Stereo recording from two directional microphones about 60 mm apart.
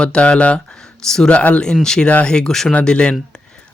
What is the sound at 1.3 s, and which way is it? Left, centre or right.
Speech, left.